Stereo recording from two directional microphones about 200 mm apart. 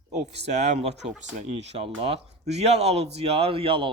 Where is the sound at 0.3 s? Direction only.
35° right (ahead or behind).